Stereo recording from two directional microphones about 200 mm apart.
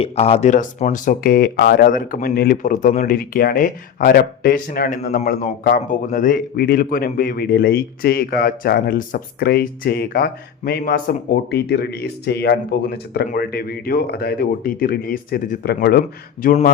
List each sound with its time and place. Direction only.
0.0 s speech: 30° left (ahead or behind)